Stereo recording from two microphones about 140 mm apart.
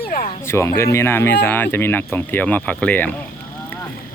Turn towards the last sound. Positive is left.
turn(degrees=10)  # may be behind; listen again after turning